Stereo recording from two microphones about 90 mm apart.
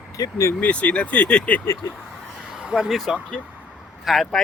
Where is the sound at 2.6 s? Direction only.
10° right (ahead or behind).